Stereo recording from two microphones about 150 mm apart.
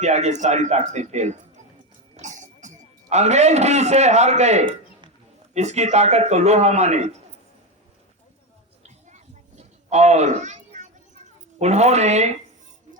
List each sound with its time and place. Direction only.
0.0 s speech: 50° right (ahead or behind)
8.8 s a sound: 50° right (ahead or behind)
11.6 s speech: 50° right (ahead or behind)